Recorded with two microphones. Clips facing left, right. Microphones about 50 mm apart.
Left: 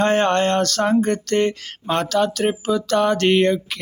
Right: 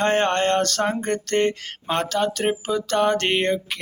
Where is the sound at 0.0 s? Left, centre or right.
Right.